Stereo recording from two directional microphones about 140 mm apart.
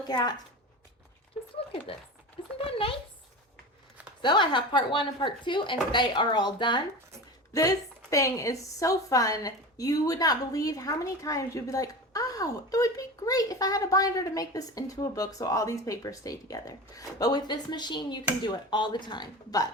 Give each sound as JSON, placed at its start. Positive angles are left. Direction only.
{"t": 0.1, "sound": "a woman's voice", "side_deg": 30}
{"t": 2.6, "sound": "a sound", "side_deg": 40}
{"t": 4.2, "sound": "speech", "side_deg": 35}
{"t": 8.1, "sound": "a woman's voice", "side_deg": 20}